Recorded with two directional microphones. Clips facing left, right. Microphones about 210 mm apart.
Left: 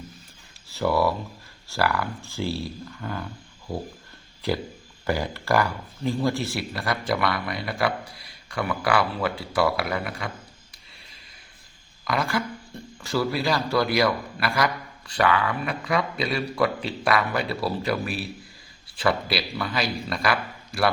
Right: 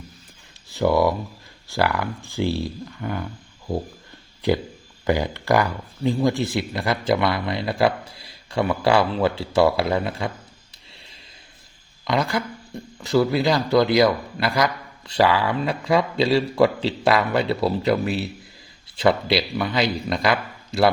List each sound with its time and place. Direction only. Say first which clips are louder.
0.7 s speech: right 4 dB; 15° right (ahead or behind)
5.0 s speech: right 5 dB; 15° right (ahead or behind)
10.9 s a sound: right 4 dB; 25° right (ahead or behind)
12.0 s speech: right 3 dB; 20° right (ahead or behind)